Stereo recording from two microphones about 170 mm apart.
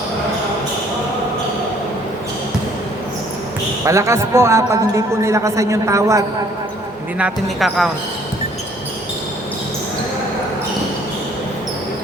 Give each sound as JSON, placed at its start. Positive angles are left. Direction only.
{"t": 3.8, "sound": "a man's voice", "side_deg": -15}
{"t": 7.2, "sound": "speech", "side_deg": -5}